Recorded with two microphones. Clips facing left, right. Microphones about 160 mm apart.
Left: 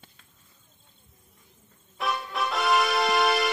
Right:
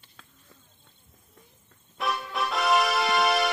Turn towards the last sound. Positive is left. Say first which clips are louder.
# left 1 dB
turn(degrees=0)  # may be behind; listen again after turning